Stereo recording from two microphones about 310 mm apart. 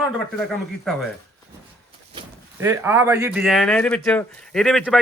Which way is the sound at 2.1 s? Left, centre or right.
Centre.